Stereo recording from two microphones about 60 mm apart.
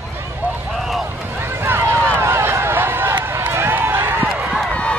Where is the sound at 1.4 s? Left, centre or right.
Right.